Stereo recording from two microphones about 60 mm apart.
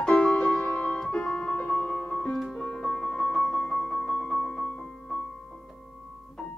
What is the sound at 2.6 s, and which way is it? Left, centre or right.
Music, centre.